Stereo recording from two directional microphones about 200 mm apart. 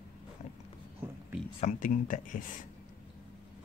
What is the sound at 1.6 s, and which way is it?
Speech, 40° left (ahead or behind).